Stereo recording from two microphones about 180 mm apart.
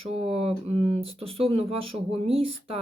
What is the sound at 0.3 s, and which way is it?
Speech, 35° right (ahead or behind).